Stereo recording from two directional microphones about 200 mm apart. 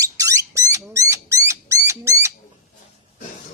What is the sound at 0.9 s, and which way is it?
Rodents, 15° right (ahead or behind).